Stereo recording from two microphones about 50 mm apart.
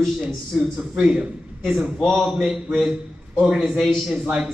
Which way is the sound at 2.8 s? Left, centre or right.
Centre.